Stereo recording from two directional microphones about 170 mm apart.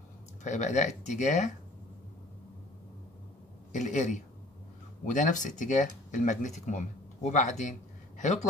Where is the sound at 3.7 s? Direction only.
45° left (ahead or behind).